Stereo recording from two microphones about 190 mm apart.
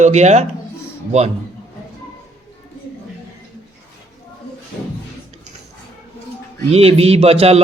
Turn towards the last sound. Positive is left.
turn(degrees=-30)  # may be behind; listen again after turning